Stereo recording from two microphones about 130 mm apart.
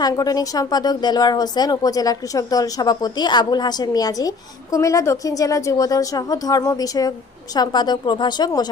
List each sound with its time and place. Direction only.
0.0 s speech: 30° left (ahead or behind)